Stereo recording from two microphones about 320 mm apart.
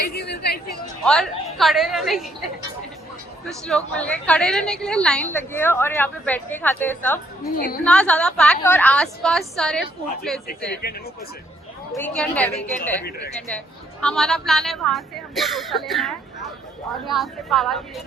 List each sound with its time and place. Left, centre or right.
0.0 s chatter: left
1.0 s a woman's voice: centre
3.7 s a woman's voice: centre
7.5 s a woman's voice: left
7.9 s a woman's voice: centre
10.8 s a woman's voice: left
11.9 s a woman's voice: centre